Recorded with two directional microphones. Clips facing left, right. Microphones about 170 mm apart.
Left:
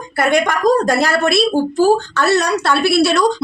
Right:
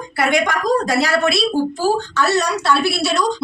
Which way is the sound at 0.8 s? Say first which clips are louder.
Left 2 dB; 50° left (ahead or behind).